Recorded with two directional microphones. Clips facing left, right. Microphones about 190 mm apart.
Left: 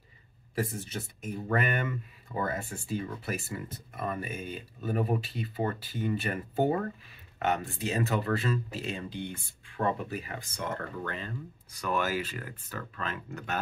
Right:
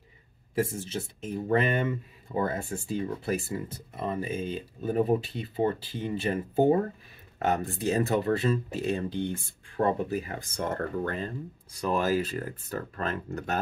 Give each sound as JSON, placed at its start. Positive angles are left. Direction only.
{"t": 0.6, "sound": "speech", "side_deg": -25}
{"t": 9.8, "sound": "speech", "side_deg": -35}